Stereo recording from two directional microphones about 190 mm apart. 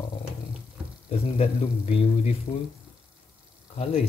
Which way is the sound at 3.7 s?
30° left (ahead or behind).